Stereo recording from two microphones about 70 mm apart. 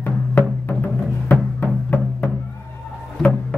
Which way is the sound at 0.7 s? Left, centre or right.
Left.